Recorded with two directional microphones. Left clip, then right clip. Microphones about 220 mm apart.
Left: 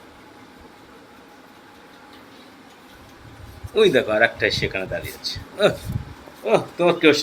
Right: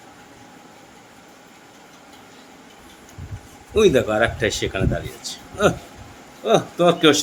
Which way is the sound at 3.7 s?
25° right (ahead or behind).